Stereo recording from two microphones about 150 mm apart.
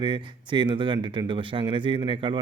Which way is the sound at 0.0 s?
30° right (ahead or behind).